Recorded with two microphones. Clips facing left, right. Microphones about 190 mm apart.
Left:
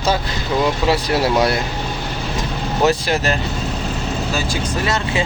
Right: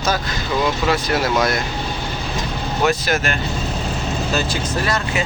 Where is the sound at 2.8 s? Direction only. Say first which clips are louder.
Left 2 dB; 30° left (ahead or behind).